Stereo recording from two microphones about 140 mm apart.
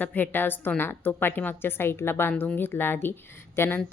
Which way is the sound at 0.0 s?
10° left (ahead or behind).